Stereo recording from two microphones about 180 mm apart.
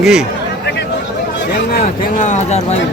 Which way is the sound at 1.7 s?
50° left (ahead or behind).